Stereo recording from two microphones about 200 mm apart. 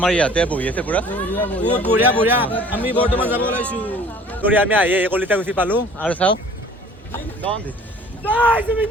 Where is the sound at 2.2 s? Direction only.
10° right (ahead or behind).